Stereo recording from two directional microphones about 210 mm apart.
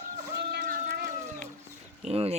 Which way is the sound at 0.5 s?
40° right (ahead or behind).